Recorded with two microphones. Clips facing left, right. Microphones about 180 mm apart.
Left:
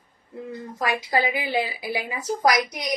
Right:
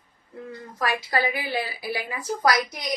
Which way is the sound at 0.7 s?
20° left (ahead or behind).